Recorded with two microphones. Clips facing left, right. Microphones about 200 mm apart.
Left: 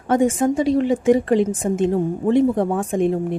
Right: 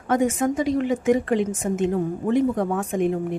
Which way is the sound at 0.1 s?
30° left (ahead or behind).